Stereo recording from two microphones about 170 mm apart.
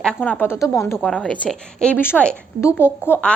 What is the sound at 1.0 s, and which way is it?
A woman's voice, centre (ahead or behind).